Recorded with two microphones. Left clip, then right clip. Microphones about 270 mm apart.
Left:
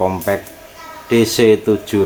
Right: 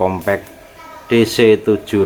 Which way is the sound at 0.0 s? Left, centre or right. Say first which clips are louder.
Right 1 dB; centre.